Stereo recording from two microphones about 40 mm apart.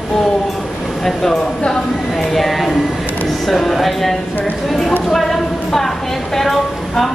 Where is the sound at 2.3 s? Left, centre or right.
Centre.